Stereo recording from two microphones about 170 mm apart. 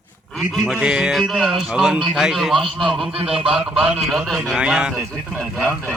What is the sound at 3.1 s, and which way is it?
Speech, 35° right (ahead or behind).